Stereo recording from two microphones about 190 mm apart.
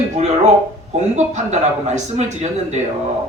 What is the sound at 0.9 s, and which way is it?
A man's voice, 35° right (ahead or behind).